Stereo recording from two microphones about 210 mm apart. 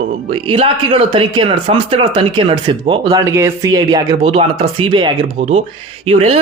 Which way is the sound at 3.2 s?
15° right (ahead or behind).